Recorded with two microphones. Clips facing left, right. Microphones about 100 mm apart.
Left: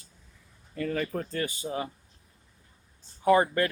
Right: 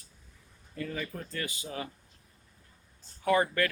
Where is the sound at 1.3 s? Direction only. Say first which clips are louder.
Left 6 dB; 30° left (ahead or behind).